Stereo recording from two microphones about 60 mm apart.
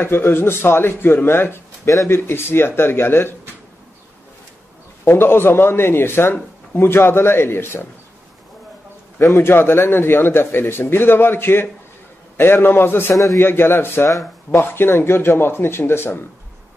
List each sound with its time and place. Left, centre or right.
0.0 s a man's voice: left
5.0 s a man's voice: left
9.3 s a man's voice: left